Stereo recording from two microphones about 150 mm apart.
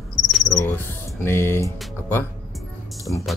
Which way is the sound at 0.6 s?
15° left (ahead or behind).